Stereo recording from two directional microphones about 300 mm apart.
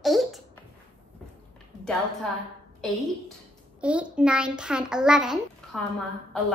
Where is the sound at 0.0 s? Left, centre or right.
Centre.